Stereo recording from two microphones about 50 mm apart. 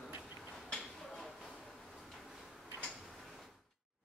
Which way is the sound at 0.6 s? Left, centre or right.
Centre.